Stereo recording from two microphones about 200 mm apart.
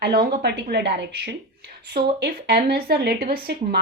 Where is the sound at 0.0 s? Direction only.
50° right (ahead or behind).